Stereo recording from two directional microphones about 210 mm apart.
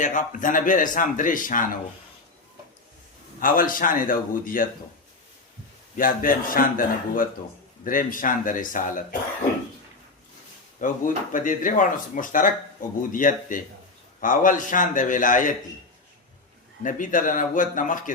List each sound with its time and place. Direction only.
0.0 s speech: 35° left (ahead or behind)
3.4 s speech: 40° left (ahead or behind)
6.0 s speech: 40° left (ahead or behind)
10.8 s speech: 40° left (ahead or behind)
16.8 s speech: 40° left (ahead or behind)